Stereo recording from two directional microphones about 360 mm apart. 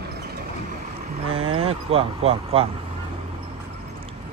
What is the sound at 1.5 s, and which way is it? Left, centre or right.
Speech, centre.